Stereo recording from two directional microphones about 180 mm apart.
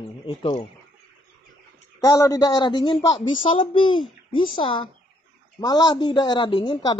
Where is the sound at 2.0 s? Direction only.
20° left (ahead or behind).